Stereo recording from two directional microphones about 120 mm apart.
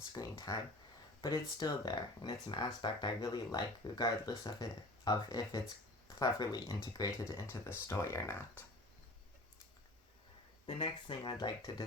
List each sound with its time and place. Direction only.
0.1 s speech: 30° left (ahead or behind)
10.7 s speech: 40° left (ahead or behind)